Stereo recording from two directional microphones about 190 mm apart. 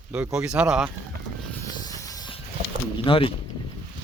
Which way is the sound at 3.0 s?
30° left (ahead or behind).